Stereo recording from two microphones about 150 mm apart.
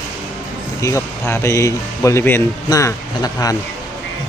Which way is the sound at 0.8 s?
20° left (ahead or behind).